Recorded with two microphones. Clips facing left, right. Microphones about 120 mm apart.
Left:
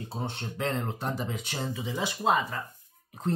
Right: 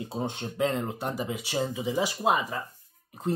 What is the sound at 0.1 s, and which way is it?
Speech, 15° right (ahead or behind).